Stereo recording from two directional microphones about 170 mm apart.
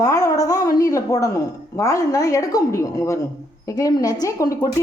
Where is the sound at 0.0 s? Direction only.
20° left (ahead or behind).